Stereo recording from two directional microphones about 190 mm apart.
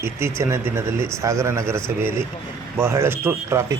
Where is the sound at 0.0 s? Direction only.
15° right (ahead or behind).